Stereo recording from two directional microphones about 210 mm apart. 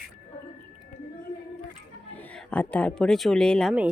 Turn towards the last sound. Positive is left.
turn(degrees=-5)  # may be behind; listen again after turning